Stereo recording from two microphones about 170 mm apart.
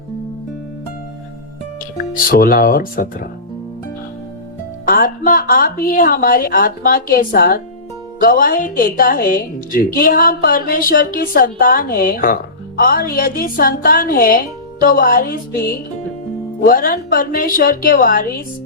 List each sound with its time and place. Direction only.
2.0 s a woman's voice: 60° left (ahead or behind)
4.9 s a woman's voice: 55° left (ahead or behind)